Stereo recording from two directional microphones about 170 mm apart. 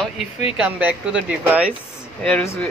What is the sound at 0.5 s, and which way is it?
Speech, 5° right (ahead or behind).